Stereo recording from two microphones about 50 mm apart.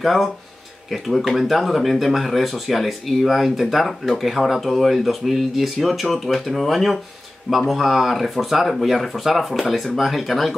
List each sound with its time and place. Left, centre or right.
0.0 s speech: centre